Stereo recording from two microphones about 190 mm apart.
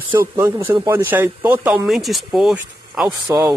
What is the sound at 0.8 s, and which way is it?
Speech, 10° right (ahead or behind).